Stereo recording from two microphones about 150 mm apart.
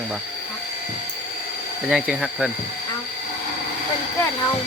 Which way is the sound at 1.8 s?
5° right (ahead or behind).